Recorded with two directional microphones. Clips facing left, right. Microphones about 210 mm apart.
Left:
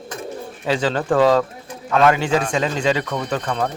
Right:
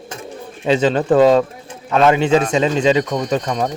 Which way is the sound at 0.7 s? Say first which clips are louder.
Right 5 dB; 20° right (ahead or behind).